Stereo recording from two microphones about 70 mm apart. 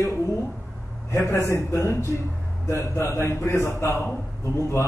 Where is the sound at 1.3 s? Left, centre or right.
Left.